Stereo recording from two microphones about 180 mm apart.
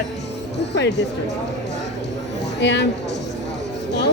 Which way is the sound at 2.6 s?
75° left (ahead or behind).